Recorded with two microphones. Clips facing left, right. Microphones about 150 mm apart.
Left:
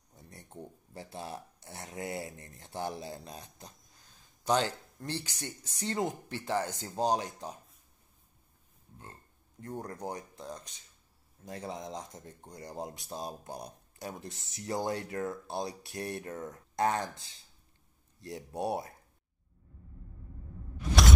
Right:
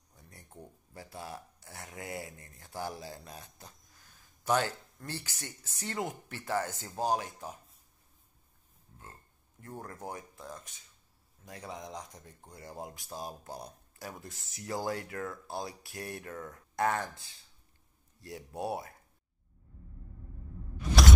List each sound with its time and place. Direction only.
0.1 s speech: 25° left (ahead or behind)
9.6 s speech: 20° left (ahead or behind)
18.2 s speech: 25° left (ahead or behind)